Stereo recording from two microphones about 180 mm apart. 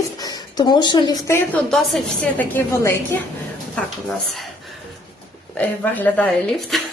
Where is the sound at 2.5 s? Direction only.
15° left (ahead or behind).